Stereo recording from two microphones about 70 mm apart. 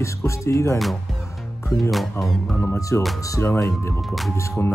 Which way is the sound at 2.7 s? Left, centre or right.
Left.